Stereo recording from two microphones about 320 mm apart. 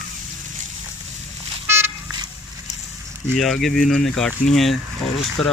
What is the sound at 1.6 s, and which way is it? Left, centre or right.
Vehicle, centre.